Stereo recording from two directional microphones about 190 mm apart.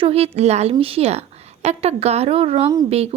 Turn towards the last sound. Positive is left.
turn(degrees=-30)  # may be behind; listen again after turning